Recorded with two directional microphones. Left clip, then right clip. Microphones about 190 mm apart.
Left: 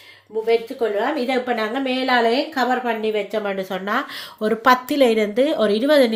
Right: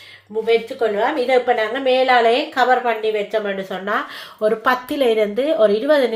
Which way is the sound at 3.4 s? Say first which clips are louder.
Right 1 dB; 60° left (ahead or behind).